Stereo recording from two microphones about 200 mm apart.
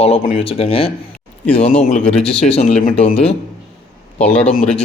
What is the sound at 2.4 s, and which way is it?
Speech, 35° left (ahead or behind).